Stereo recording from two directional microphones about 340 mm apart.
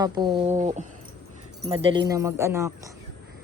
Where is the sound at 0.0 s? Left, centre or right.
Centre.